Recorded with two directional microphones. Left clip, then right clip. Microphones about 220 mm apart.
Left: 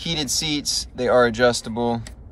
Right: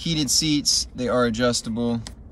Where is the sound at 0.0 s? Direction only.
20° right (ahead or behind).